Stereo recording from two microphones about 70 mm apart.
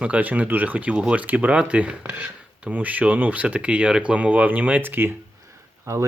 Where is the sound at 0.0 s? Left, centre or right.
Right.